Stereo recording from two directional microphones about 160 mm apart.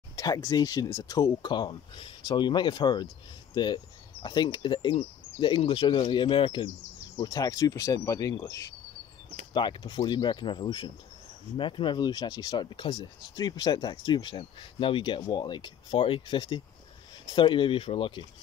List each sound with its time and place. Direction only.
0.1 s speech: 20° left (ahead or behind)